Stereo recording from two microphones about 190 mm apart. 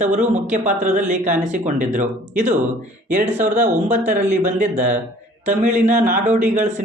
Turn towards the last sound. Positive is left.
turn(degrees=-40)  # may be behind; listen again after turning